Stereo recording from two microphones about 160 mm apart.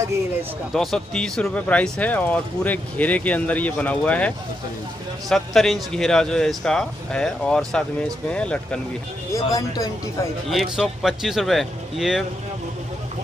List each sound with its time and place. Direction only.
0.7 s speech: 5° left (ahead or behind)
5.3 s speech: centre (ahead or behind)
9.3 s speech: 20° left (ahead or behind)
10.5 s speech: centre (ahead or behind)